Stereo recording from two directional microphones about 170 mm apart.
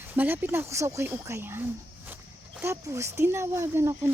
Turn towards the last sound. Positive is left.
turn(degrees=-15)  # may be behind; listen again after turning